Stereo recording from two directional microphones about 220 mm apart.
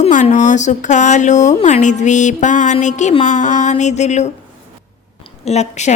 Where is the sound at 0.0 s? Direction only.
35° left (ahead or behind).